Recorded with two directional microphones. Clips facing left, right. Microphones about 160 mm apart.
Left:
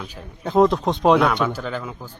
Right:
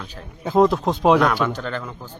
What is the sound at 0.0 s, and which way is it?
Speech, 10° left (ahead or behind).